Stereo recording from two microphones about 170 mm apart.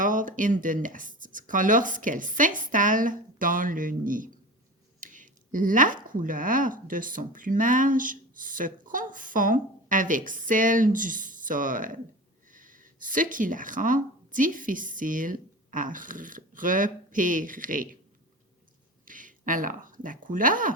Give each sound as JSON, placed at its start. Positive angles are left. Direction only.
{"t": 0.0, "sound": "speech", "side_deg": -50}
{"t": 19.0, "sound": "speech", "side_deg": -50}